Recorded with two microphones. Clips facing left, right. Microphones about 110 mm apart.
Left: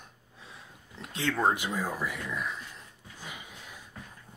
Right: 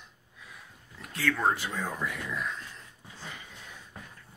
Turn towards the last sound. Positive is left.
turn(degrees=10)  # may be behind; listen again after turning